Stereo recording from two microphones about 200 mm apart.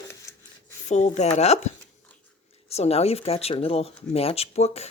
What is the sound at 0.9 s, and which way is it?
Speech, 35° left (ahead or behind).